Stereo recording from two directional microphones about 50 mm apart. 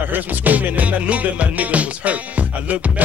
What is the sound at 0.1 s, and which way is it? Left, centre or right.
Music, right.